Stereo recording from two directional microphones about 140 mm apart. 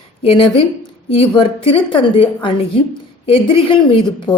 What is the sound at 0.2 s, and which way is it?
A woman's voice, 40° left (ahead or behind).